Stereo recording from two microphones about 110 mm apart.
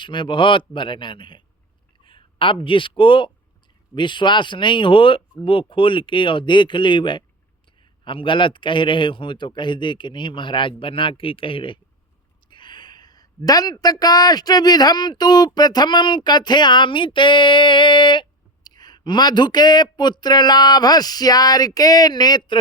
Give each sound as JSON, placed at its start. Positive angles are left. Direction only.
{"t": 0.0, "sound": "a man's voice", "side_deg": 45}